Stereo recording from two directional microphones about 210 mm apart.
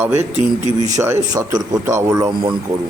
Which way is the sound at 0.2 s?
30° right (ahead or behind).